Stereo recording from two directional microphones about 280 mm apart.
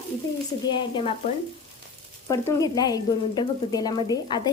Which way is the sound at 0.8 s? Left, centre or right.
Centre.